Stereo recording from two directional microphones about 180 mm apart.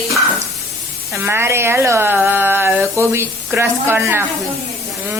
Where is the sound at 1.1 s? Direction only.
15° right (ahead or behind).